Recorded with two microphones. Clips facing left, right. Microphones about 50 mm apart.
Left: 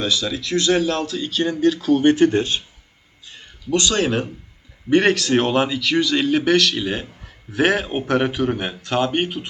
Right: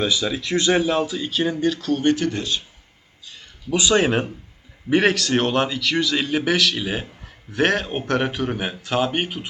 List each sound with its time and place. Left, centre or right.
0.0 s speech: centre
2.0 s speech: left
3.7 s speech: centre
4.9 s a man's voice: centre